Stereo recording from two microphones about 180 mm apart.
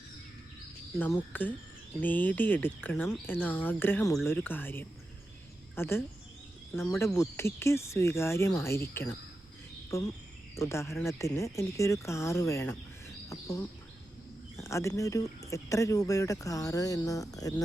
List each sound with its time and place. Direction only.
0.9 s speech: 10° left (ahead or behind)
7.2 s speech: 15° left (ahead or behind)